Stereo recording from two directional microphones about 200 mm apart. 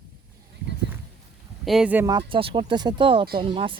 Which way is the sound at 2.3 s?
25° right (ahead or behind).